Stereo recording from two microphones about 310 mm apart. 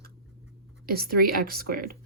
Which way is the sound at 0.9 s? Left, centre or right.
Right.